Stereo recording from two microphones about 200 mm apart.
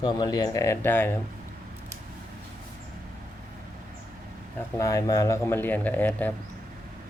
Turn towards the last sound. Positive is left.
turn(degrees=10)  # may be behind; listen again after turning